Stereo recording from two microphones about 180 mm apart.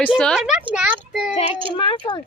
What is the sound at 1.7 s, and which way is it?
Speech, 25° left (ahead or behind).